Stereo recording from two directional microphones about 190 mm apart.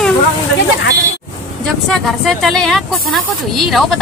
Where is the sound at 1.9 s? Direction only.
Centre (ahead or behind).